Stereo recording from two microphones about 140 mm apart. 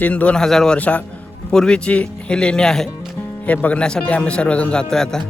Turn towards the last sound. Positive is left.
turn(degrees=5)  # may be behind; listen again after turning